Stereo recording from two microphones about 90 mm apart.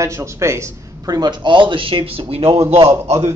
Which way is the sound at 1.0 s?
50° right (ahead or behind).